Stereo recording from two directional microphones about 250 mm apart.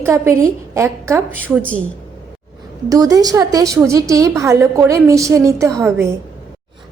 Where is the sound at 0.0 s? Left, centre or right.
Centre.